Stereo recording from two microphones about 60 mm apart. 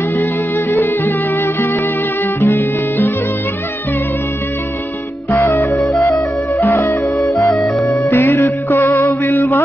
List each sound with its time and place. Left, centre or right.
0.2 s music: left
2.4 s music: left
5.3 s music: left
5.9 s music: left
7.2 s music: left
8.1 s music: left